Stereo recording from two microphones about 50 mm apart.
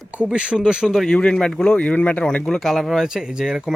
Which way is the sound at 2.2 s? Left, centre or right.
Centre.